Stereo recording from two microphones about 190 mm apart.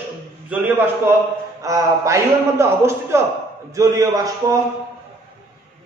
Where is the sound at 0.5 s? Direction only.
10° right (ahead or behind).